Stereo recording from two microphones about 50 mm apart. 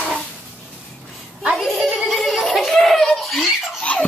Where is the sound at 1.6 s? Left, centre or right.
Centre.